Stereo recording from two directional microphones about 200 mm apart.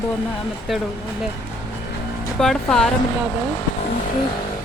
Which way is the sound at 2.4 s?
5° left (ahead or behind).